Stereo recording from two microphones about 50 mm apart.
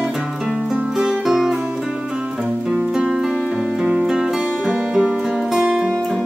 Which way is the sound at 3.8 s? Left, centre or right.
Centre.